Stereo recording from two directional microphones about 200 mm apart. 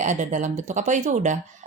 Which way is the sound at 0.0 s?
35° right (ahead or behind).